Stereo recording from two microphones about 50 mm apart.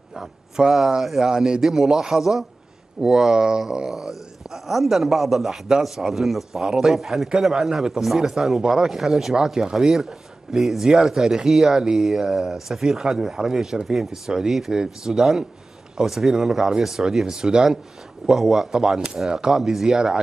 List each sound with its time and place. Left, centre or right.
0.1 s speech: centre